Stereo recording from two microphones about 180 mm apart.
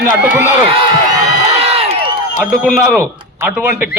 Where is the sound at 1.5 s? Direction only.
35° right (ahead or behind).